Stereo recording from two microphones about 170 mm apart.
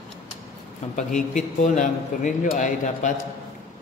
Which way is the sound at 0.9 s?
45° left (ahead or behind).